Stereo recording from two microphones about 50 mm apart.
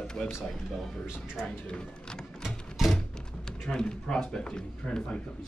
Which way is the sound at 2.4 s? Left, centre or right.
Centre.